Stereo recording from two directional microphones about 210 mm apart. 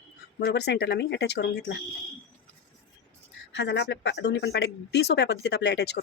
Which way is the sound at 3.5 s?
55° left (ahead or behind).